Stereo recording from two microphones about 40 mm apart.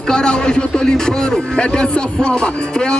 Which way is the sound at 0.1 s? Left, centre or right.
Left.